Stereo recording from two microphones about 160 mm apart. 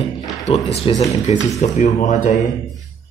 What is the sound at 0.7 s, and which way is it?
Speech, 40° left (ahead or behind).